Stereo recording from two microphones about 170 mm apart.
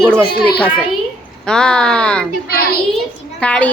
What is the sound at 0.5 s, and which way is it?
A woman's voice, 5° left (ahead or behind).